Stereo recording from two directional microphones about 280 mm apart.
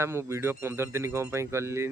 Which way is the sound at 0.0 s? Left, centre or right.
Centre.